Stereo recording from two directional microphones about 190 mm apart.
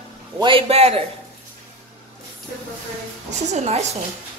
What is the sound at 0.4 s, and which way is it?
Speech, 25° right (ahead or behind).